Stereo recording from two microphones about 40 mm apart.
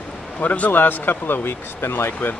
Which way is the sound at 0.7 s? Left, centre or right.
Left.